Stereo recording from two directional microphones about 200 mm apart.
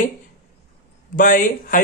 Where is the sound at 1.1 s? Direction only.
40° left (ahead or behind).